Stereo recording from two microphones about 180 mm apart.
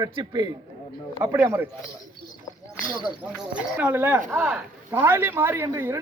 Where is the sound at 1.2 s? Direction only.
10° right (ahead or behind).